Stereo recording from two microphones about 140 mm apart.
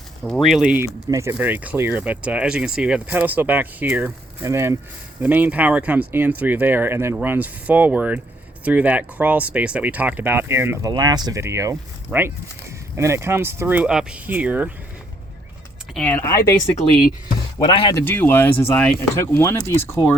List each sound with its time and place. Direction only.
0.2 s speech: centre (ahead or behind)
1.1 s speech: 20° right (ahead or behind)
10.9 s speech: 30° right (ahead or behind); by 14.7 s 10° right (ahead or behind)
16.0 s speech: 10° left (ahead or behind)
17.7 s speech: 35° left (ahead or behind)
17.9 s speech: 15° left (ahead or behind)